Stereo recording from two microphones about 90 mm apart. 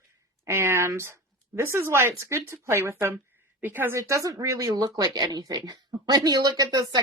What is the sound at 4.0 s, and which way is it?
Speech, 35° right (ahead or behind).